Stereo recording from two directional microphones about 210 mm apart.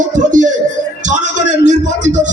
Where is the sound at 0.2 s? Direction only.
35° right (ahead or behind).